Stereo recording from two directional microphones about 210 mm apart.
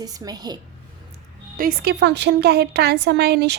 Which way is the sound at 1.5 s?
45° right (ahead or behind).